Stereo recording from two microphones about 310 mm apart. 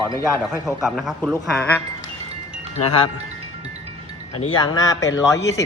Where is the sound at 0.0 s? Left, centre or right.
Centre.